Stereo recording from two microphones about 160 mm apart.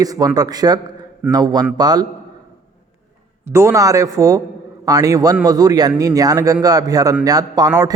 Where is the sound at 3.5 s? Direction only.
15° right (ahead or behind).